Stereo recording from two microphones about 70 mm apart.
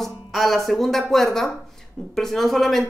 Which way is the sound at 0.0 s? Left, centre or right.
Centre.